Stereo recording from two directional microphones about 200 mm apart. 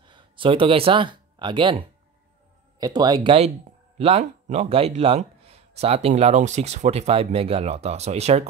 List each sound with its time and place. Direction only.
0.0 s speech: 25° right (ahead or behind)
2.8 s speech: 20° right (ahead or behind)
4.0 s speech: 35° right (ahead or behind)